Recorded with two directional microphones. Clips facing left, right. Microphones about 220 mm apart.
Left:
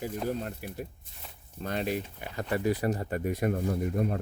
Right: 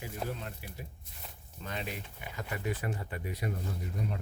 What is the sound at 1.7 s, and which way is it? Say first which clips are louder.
Speech: left 9 dB; 40° left (ahead or behind).